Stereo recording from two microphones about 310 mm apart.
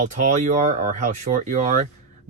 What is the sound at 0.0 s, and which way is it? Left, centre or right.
Speech, right.